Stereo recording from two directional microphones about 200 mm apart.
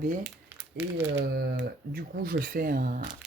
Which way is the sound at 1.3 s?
55° right (ahead or behind).